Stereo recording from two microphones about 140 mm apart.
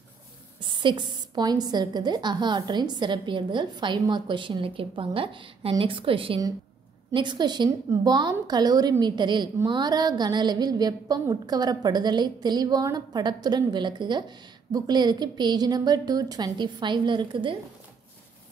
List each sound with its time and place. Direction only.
0.6 s a woman's voice: 35° right (ahead or behind)